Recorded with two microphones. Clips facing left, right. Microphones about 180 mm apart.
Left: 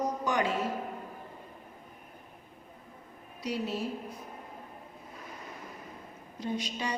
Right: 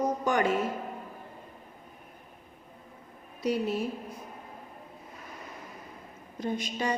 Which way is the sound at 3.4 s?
55° right (ahead or behind).